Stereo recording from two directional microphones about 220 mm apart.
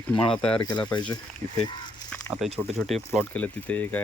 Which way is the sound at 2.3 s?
10° right (ahead or behind).